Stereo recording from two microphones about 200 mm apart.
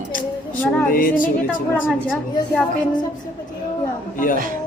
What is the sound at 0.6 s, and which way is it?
Music, 5° left (ahead or behind).